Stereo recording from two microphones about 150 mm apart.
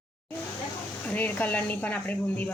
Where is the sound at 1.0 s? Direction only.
10° left (ahead or behind).